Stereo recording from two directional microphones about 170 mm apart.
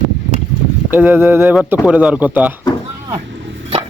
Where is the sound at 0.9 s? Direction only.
10° right (ahead or behind).